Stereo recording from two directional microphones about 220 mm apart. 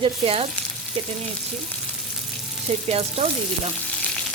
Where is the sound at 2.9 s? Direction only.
30° right (ahead or behind).